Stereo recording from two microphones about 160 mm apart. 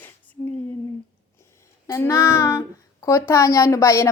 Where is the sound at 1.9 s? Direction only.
20° left (ahead or behind).